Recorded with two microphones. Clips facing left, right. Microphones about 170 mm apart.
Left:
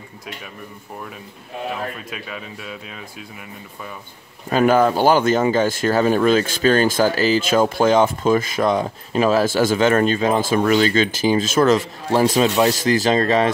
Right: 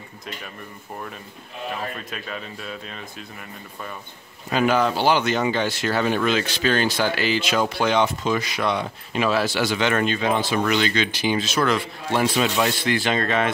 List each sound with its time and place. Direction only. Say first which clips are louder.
2.0 s speech: left 1 dB; 5° left (ahead or behind)
4.5 s a man's voice: left 5 dB; 45° left (ahead or behind)